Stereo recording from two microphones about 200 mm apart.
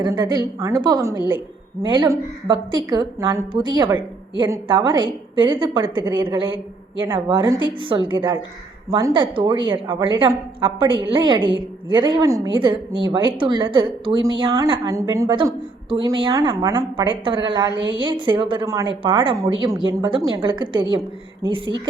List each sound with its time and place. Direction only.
0.0 s a woman's voice: 20° right (ahead or behind)